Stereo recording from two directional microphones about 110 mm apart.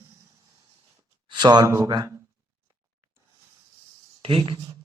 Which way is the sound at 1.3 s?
40° right (ahead or behind).